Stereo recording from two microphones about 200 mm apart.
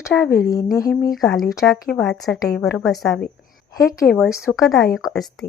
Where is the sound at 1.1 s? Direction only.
Centre (ahead or behind).